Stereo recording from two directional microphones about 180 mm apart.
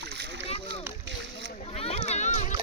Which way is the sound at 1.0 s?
85° right.